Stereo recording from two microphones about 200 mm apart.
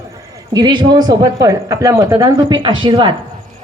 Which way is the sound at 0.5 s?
20° right (ahead or behind).